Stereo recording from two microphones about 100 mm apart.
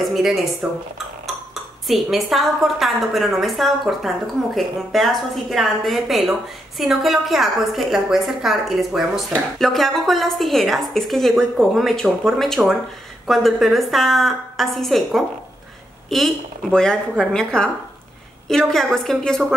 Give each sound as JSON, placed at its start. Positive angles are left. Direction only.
{"t": 0.0, "sound": "a woman's voice", "side_deg": 0}